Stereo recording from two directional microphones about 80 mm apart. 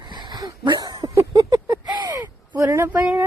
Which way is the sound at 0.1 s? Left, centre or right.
Right.